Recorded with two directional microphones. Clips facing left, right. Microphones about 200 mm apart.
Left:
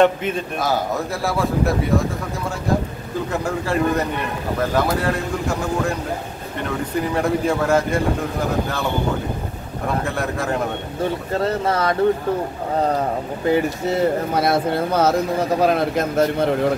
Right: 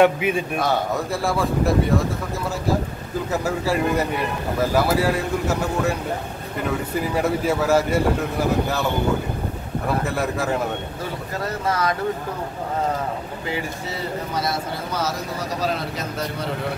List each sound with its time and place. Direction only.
0.0 s a man's voice: 10° right (ahead or behind)
3.4 s a man's voice: 5° right (ahead or behind)
7.2 s a man's voice: 5° right (ahead or behind)
10.0 s a man's voice: 5° right (ahead or behind)
11.0 s speech: 25° left (ahead or behind)
13.5 s speech: 55° left (ahead or behind)